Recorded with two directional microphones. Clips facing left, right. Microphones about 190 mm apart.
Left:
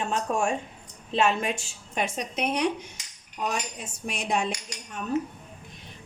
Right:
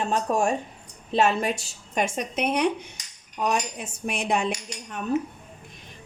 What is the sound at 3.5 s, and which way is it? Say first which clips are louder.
Cutlery: right 5 dB; 60° right (ahead or behind).